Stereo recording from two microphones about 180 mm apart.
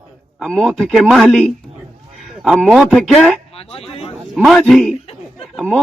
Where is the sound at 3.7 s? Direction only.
35° left (ahead or behind).